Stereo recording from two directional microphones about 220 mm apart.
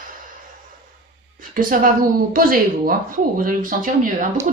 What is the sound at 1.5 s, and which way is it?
A woman's voice, 40° right (ahead or behind).